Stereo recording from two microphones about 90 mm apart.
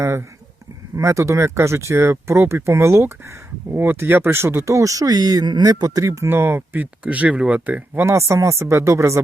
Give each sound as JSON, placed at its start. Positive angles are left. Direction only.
{"t": 0.0, "sound": "speech", "side_deg": -30}
{"t": 7.0, "sound": "speech", "side_deg": -15}
{"t": 8.3, "sound": "speech", "side_deg": -35}